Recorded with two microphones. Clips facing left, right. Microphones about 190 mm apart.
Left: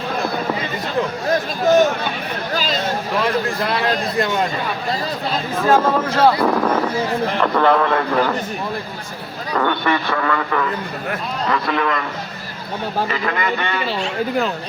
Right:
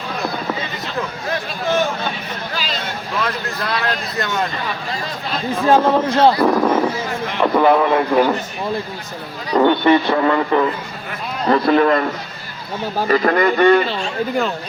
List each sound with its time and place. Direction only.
1.3 s speech: 40° left (ahead or behind)
2.5 s a sound: 45° left (ahead or behind)
5.6 s speech: 25° right (ahead or behind)
6.4 s a man's voice: 5° right (ahead or behind)
9.5 s a man's voice: 25° right (ahead or behind)
13.1 s speech: 40° right (ahead or behind)